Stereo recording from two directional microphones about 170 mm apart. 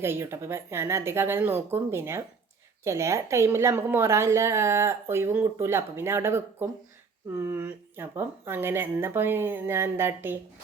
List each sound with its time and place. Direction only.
0.0 s a woman's voice: 15° right (ahead or behind)